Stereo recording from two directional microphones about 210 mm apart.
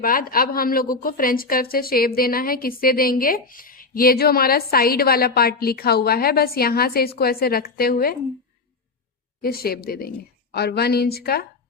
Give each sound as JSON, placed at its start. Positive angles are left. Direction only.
{"t": 0.0, "sound": "a woman's voice", "side_deg": 40}
{"t": 9.4, "sound": "a woman's voice", "side_deg": 45}